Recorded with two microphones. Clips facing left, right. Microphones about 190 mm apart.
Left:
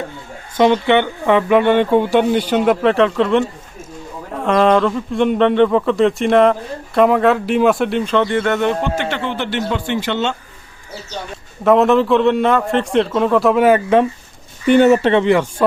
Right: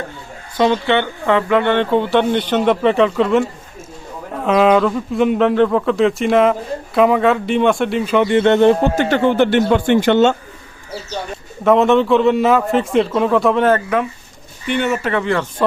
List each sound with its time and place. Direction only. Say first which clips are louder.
0.5 s speech: left 2 dB; 15° left (ahead or behind); by 10.3 s 50° right (ahead or behind)
11.6 s speech: even; centre (ahead or behind)
14.7 s speech: left 8 dB; 40° left (ahead or behind); by 15.6 s 15° left (ahead or behind)